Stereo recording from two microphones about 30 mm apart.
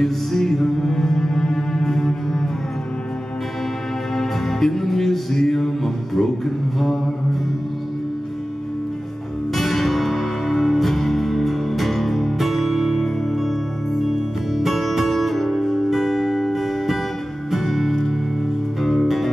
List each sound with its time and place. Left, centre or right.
0.0 s music: centre
4.1 s music: centre
9.5 s music: centre
18.8 s music: centre
19.0 s music: centre